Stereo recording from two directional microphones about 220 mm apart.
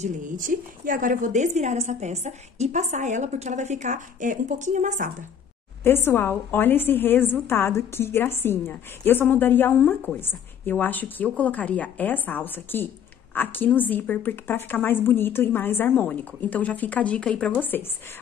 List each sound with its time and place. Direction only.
0.0 s a woman's voice: 35° right (ahead or behind)
5.9 s a woman's voice: 10° left (ahead or behind)